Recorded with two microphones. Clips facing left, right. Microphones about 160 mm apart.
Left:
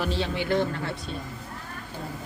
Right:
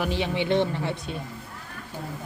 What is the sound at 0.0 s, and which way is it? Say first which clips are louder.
Speech: right 1 dB; 15° right (ahead or behind).